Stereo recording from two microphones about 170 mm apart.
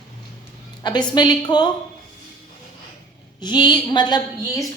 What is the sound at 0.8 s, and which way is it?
Speech, 25° left (ahead or behind).